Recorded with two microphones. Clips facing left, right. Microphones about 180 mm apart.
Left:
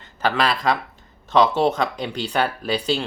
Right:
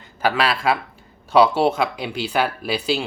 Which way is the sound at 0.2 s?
5° right (ahead or behind).